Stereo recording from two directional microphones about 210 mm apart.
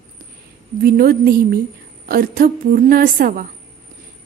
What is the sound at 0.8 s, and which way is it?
A woman's voice, 45° right (ahead or behind).